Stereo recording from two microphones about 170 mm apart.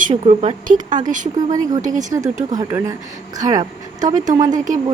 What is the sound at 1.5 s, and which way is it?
A woman's voice, 25° right (ahead or behind).